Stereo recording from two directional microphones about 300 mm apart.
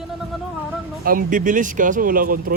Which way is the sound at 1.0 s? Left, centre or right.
Right.